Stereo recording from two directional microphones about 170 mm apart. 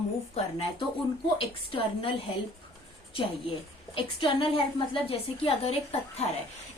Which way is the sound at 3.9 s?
35° left (ahead or behind).